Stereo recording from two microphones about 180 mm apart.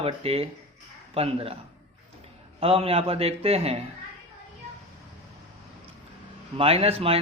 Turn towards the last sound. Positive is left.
turn(degrees=-35)  # may be behind; listen again after turning